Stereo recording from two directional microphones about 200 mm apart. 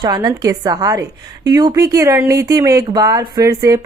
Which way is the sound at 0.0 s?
20° right (ahead or behind).